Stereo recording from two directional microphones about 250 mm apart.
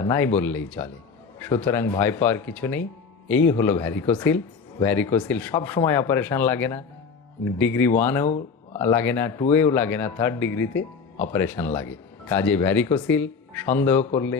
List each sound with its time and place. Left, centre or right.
0.0 s a man's voice: centre